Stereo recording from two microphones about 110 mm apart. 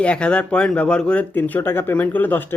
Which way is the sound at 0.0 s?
10° left (ahead or behind).